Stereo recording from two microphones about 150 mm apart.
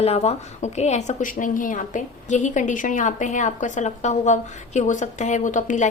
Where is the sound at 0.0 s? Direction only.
45° left (ahead or behind).